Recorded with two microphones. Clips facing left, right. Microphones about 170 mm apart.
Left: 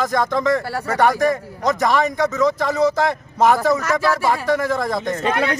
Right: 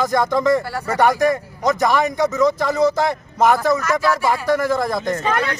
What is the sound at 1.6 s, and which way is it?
A man's voice, 5° right (ahead or behind).